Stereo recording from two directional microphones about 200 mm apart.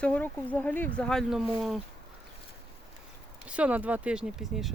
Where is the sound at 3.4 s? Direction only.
5° right (ahead or behind).